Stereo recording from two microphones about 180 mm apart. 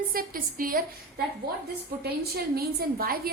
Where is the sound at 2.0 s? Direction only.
60° right (ahead or behind).